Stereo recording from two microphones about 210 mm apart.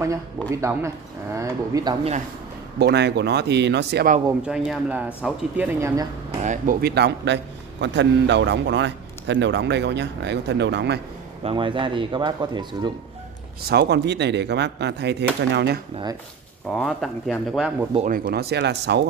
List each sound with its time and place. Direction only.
0.5 s speech: 15° right (ahead or behind)
2.8 s speech: 55° right (ahead or behind)
4.4 s speech: 5° right (ahead or behind)
6.4 s a man's voice: 40° right (ahead or behind); by 11.0 s 55° right (ahead or behind)
11.4 s speech: 25° right (ahead or behind)
13.7 s speech: 50° right (ahead or behind)
16.7 s speech: centre (ahead or behind)
17.9 s speech: 40° right (ahead or behind)